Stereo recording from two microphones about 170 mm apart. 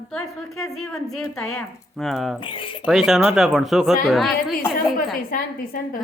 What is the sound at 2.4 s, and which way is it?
Speech, 30° left (ahead or behind).